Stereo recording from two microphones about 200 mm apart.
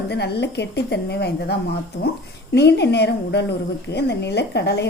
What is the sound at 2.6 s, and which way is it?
A woman's voice, 55° left (ahead or behind).